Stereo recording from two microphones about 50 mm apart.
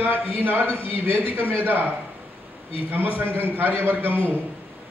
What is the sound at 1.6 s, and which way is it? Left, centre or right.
Speech, right.